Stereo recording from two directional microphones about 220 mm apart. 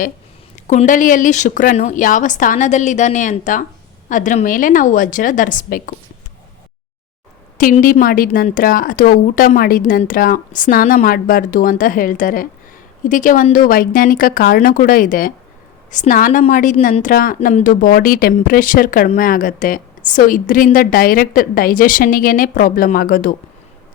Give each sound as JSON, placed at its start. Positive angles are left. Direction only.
{"t": 0.7, "sound": "a woman's voice", "side_deg": 35}
{"t": 7.6, "sound": "a woman's voice", "side_deg": 40}